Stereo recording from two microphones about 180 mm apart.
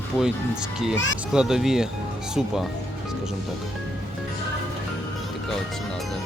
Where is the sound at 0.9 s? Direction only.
90° left.